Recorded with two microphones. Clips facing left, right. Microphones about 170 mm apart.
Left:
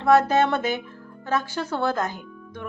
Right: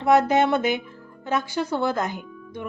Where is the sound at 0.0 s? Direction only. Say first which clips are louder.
Even; 15° right (ahead or behind).